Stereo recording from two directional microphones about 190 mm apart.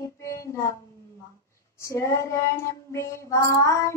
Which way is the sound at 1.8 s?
15° left (ahead or behind).